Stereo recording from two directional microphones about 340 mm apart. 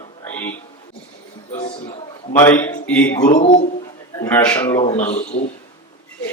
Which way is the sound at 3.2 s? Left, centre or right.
Left.